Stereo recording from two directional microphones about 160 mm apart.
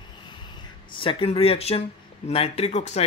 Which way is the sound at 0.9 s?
35° left (ahead or behind).